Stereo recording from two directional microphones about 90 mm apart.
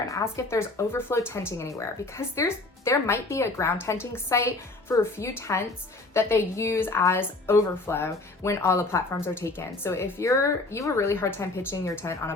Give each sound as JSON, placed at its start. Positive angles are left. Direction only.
{"t": 0.1, "sound": "a woman's voice", "side_deg": 35}